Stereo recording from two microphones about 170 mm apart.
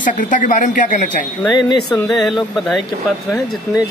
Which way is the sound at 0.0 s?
50° left (ahead or behind).